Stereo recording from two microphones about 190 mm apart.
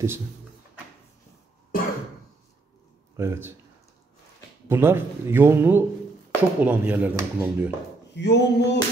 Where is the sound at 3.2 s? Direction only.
10° right (ahead or behind).